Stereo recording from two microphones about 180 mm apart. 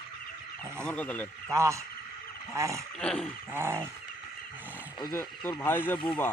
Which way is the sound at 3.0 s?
5° left (ahead or behind).